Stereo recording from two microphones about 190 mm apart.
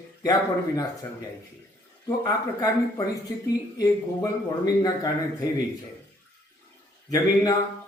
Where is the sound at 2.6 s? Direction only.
20° left (ahead or behind).